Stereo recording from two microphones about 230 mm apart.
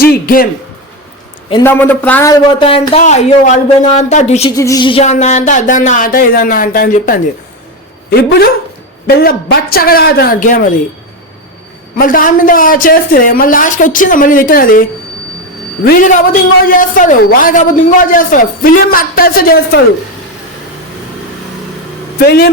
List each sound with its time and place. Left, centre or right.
0.0 s speech: left
1.6 s speech: centre; by 4.5 s left
4.5 s speech: centre; by 10.6 s left
11.9 s speech: left
22.2 s speech: left